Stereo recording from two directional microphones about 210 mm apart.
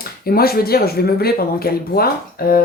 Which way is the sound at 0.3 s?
45° left (ahead or behind).